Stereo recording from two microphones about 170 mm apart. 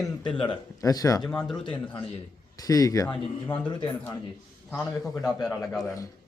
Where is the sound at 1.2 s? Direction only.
5° left (ahead or behind).